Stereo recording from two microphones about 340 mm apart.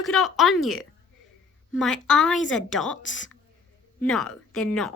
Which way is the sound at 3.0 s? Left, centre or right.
Left.